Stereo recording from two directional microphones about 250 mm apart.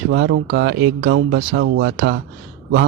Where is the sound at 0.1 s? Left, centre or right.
Right.